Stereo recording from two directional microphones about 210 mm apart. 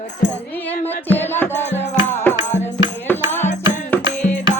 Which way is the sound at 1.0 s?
10° left (ahead or behind).